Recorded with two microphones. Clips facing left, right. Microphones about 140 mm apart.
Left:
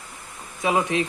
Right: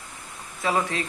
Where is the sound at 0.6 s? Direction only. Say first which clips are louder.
Left 3 dB; 15° left (ahead or behind).